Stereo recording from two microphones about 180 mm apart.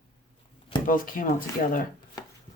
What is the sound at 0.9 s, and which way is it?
Speech, 50° left (ahead or behind).